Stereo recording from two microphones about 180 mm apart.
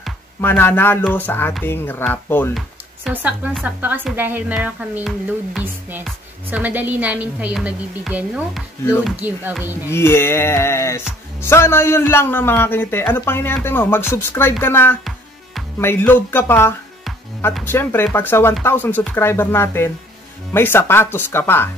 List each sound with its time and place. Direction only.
0.4 s a man's voice: 10° left (ahead or behind)
3.1 s a woman's voice: 10° right (ahead or behind)
9.8 s a man's voice: 15° left (ahead or behind)